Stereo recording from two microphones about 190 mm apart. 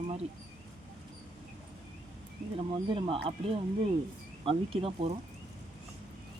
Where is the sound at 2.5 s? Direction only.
25° right (ahead or behind).